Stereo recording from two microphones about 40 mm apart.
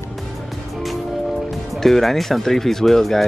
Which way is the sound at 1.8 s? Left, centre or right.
Centre.